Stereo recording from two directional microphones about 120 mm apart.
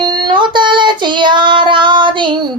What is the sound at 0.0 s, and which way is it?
Child singing, 40° right (ahead or behind).